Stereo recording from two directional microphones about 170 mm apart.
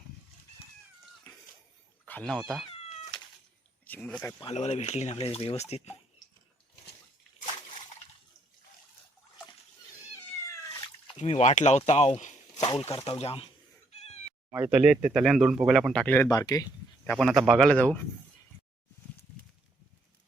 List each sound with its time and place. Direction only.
2.0 s speech: 10° left (ahead or behind)
3.8 s speech: 10° left (ahead or behind)
4.4 s speech: 40° left (ahead or behind)
11.2 s speech: 40° left (ahead or behind)
14.5 s speech: 10° right (ahead or behind); by 16.3 s 10° left (ahead or behind)
16.3 s a sound: 20° left (ahead or behind)
17.1 s speech: centre (ahead or behind)